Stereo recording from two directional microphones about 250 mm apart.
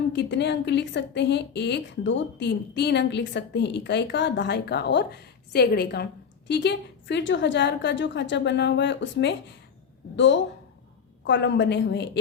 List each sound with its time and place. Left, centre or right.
0.1 s a woman's voice: left